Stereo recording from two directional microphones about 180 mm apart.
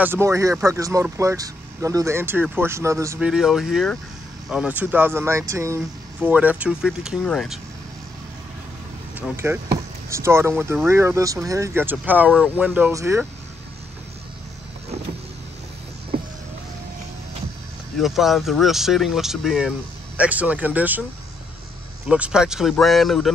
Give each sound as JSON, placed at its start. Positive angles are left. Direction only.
{"t": 0.0, "sound": "speech", "side_deg": -15}
{"t": 3.2, "sound": "speech", "side_deg": -5}
{"t": 10.0, "sound": "speech", "side_deg": -15}
{"t": 17.9, "sound": "speech", "side_deg": 0}
{"t": 22.0, "sound": "speech", "side_deg": -5}